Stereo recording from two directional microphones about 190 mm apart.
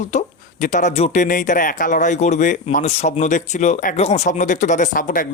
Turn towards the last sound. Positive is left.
turn(degrees=45)  # may be behind; listen again after turning